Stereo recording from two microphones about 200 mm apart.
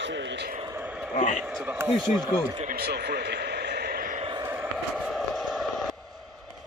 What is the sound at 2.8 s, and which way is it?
Speech, 55° right (ahead or behind).